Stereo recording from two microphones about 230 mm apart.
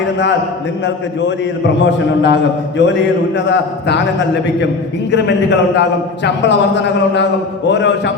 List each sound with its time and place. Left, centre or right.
1.8 s a man's voice: left
5.1 s a man's voice: left